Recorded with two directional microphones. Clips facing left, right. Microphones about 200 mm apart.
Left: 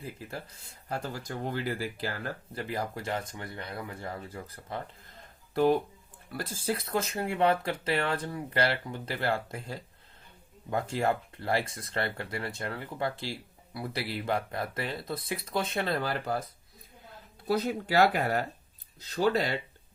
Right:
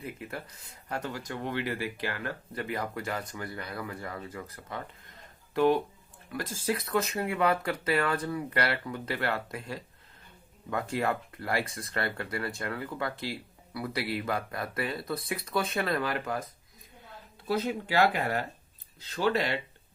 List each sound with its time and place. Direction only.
0.0 s speech: 30° left (ahead or behind)
6.7 s speech: 30° left (ahead or behind)
17.4 s speech: 40° left (ahead or behind)